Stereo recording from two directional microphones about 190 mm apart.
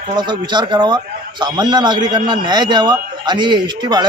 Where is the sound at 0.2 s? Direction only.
25° right (ahead or behind).